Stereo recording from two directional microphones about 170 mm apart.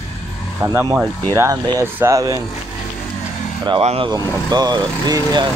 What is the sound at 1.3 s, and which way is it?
Speech, 15° right (ahead or behind).